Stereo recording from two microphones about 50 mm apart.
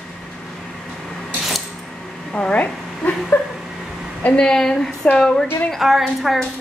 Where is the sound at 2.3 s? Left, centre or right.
Left.